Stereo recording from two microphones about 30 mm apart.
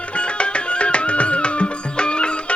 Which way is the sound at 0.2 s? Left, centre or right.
Left.